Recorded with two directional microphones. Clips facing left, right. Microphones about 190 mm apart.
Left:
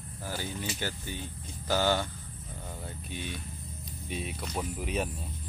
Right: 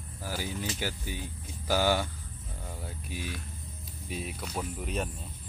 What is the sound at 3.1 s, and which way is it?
Speech, 5° right (ahead or behind).